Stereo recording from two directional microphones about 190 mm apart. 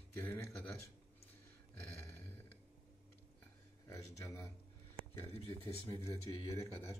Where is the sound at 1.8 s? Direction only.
10° left (ahead or behind).